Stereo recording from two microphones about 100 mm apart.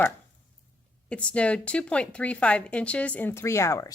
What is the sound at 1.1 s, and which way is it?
Speech, 10° left (ahead or behind).